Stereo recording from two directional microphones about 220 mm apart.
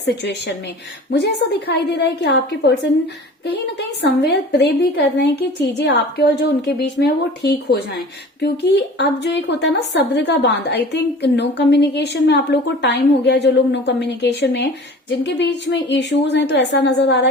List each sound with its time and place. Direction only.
0.0 s a woman's voice: 50° left (ahead or behind)